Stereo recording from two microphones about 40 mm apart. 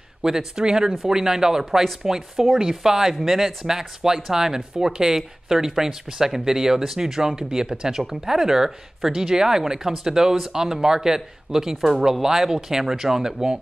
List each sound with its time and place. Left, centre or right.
0.2 s speech: centre